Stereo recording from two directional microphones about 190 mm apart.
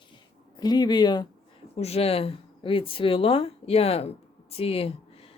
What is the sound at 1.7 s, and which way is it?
Speech, 35° left (ahead or behind).